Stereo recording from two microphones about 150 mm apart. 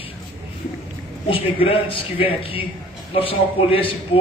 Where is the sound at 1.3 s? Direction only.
40° left (ahead or behind).